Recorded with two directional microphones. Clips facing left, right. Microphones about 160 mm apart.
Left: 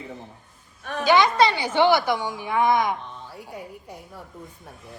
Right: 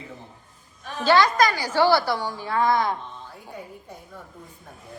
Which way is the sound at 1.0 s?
20° left (ahead or behind).